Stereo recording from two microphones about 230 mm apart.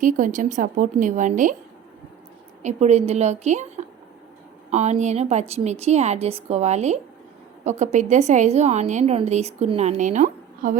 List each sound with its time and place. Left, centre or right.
0.0 s a woman's voice: right
2.6 s a woman's voice: right
4.7 s a woman's voice: right